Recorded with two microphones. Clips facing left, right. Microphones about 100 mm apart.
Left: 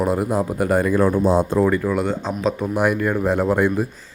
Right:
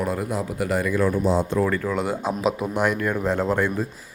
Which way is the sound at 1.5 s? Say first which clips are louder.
Left 4 dB; 15° left (ahead or behind).